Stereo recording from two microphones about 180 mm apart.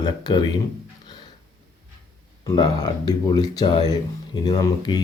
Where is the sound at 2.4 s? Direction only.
20° left (ahead or behind).